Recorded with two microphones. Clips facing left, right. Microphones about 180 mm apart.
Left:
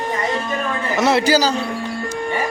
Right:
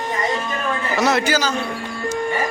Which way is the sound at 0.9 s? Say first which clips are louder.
Left 3 dB; 25° left (ahead or behind).